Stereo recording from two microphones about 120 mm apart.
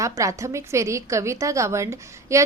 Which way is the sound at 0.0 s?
25° right (ahead or behind).